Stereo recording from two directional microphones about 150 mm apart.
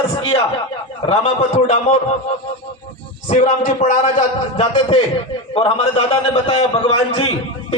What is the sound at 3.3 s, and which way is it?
A man's voice, 50° left (ahead or behind).